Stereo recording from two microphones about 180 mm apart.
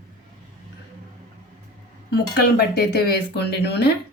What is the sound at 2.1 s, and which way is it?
Speech, 65° left (ahead or behind).